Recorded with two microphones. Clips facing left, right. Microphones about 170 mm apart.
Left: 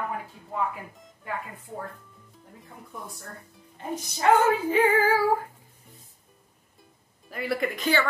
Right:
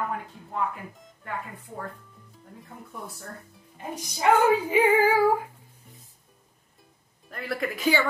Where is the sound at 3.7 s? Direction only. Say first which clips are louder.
Left 2 dB; 10° right (ahead or behind).